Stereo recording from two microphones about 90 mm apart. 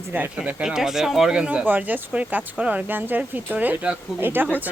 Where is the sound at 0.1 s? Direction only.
25° right (ahead or behind).